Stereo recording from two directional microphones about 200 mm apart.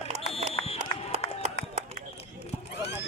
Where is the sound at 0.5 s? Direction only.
30° left (ahead or behind).